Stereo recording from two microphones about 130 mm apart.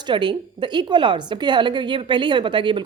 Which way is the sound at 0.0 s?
35° right (ahead or behind).